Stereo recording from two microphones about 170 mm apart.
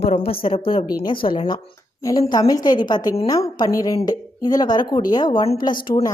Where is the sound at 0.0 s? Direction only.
35° left (ahead or behind).